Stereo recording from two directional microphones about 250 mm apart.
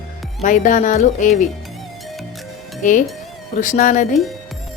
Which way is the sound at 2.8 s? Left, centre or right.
Left.